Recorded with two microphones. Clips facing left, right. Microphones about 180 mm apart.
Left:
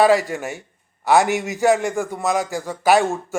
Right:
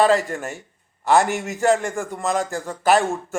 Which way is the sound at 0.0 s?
Centre (ahead or behind).